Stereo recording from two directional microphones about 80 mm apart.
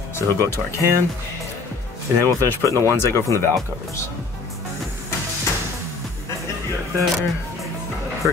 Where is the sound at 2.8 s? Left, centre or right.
Left.